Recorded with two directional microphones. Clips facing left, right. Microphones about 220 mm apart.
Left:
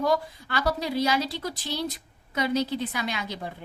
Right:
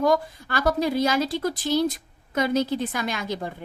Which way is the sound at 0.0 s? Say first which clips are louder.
Right 4 dB; 50° right (ahead or behind).